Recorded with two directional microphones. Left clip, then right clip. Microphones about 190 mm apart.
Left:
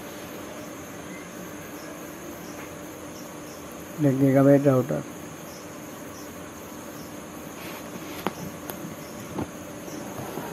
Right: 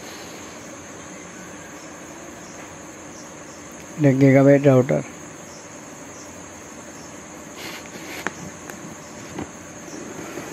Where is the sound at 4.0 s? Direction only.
35° right (ahead or behind).